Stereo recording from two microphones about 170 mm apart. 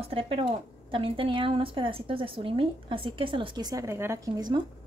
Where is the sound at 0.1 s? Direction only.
35° right (ahead or behind).